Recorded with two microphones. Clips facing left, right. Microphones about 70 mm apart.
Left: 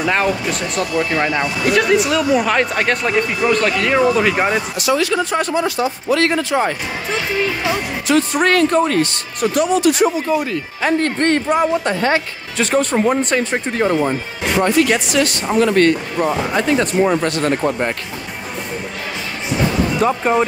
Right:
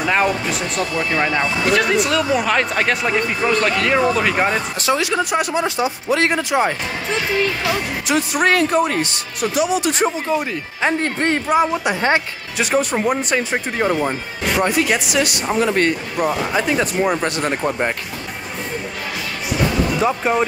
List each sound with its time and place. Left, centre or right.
0.0 s speech: centre
4.9 s speech: centre
8.1 s speech: centre
9.8 s speech: right; by 17.9 s centre
20.0 s speech: centre